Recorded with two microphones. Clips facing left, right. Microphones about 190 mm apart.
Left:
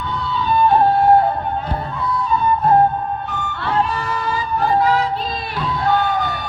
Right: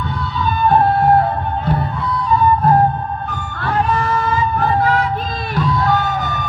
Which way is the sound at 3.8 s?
35° left (ahead or behind).